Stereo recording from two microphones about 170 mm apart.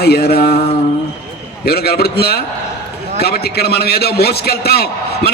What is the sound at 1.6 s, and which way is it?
A man's voice, 70° left (ahead or behind).